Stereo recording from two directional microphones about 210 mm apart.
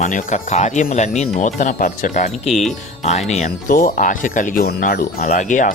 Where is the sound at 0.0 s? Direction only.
35° left (ahead or behind).